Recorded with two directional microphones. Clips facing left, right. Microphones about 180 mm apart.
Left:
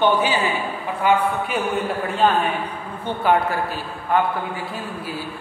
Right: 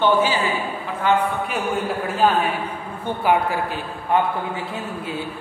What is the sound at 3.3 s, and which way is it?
Speech, 20° right (ahead or behind).